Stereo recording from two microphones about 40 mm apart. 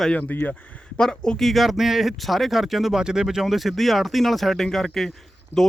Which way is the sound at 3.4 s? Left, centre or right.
Centre.